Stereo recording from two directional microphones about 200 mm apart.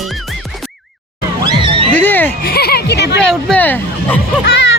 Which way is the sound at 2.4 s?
50° left (ahead or behind).